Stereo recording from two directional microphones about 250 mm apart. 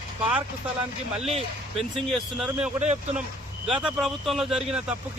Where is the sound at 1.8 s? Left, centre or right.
Centre.